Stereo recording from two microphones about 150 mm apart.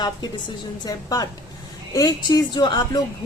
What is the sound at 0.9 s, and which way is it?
Speech, 25° left (ahead or behind).